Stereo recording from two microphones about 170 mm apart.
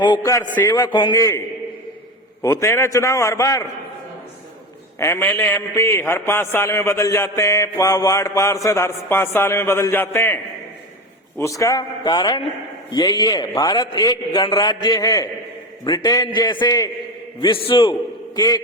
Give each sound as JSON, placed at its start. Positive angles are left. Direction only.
{"t": 0.0, "sound": "a man's voice", "side_deg": 20}
{"t": 2.4, "sound": "a man's voice", "side_deg": 20}
{"t": 4.9, "sound": "a man's voice", "side_deg": 15}